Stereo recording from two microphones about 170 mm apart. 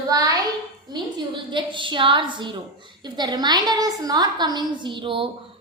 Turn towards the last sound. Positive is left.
turn(degrees=-30)  # may be behind; listen again after turning